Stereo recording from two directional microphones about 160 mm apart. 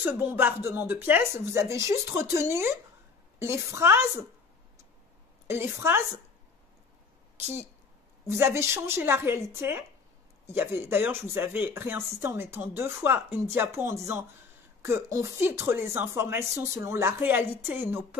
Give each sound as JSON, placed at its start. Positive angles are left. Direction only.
{"t": 0.0, "sound": "speech", "side_deg": -15}
{"t": 5.5, "sound": "speech", "side_deg": -15}
{"t": 8.4, "sound": "speech", "side_deg": -15}